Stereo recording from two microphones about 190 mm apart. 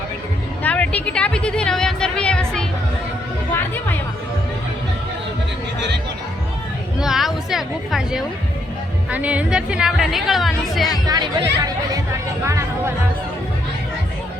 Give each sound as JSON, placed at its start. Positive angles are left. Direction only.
{"t": 0.6, "sound": "music", "side_deg": 5}
{"t": 7.0, "sound": "speech", "side_deg": 0}
{"t": 11.0, "sound": "speech", "side_deg": -20}
{"t": 12.5, "sound": "music", "side_deg": -15}